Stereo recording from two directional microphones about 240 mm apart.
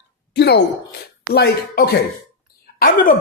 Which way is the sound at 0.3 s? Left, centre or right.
Left.